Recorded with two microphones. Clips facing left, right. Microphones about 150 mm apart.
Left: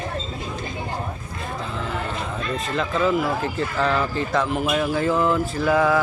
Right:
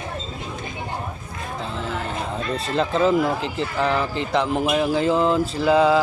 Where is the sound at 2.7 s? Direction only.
30° right (ahead or behind).